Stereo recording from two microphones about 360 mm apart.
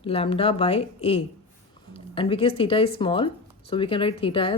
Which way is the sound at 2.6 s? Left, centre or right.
Centre.